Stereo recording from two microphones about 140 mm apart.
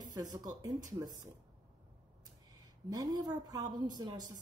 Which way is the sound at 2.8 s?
25° right (ahead or behind).